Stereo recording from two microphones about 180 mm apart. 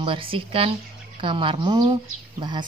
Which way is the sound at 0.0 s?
30° right (ahead or behind).